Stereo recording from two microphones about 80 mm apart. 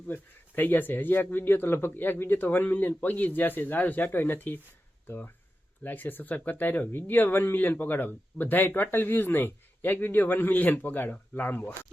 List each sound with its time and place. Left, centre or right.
0.1 s speech: left